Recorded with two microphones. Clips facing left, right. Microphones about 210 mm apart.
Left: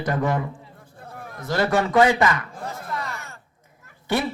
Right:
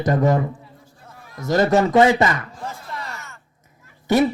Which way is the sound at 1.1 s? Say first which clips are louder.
Left 6 dB; 55° left (ahead or behind).